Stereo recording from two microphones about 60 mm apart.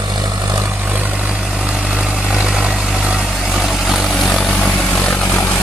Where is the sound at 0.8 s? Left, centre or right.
Right; by 5.5 s centre.